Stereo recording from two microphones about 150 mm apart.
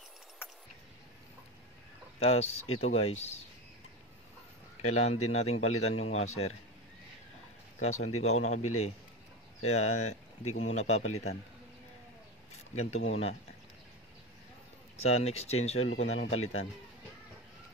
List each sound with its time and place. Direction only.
2.1 s a man's voice: 40° left (ahead or behind)
4.8 s a man's voice: 45° left (ahead or behind)
7.8 s a man's voice: 45° left (ahead or behind)
12.7 s a man's voice: 45° left (ahead or behind)
15.0 s a man's voice: 45° left (ahead or behind)